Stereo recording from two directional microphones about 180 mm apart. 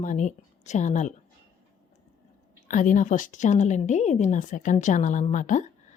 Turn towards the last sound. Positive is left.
turn(degrees=45)  # may be behind; listen again after turning